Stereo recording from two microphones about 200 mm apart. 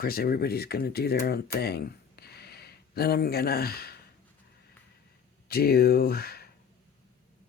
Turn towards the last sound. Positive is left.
turn(degrees=50)  # may be behind; listen again after turning